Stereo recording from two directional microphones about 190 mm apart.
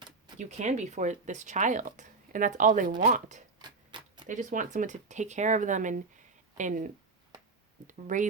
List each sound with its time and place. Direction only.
0.3 s speech: 35° right (ahead or behind)
3.6 s tick-tock: 25° right (ahead or behind)
4.3 s speech: 40° right (ahead or behind)
7.9 s speech: 40° right (ahead or behind)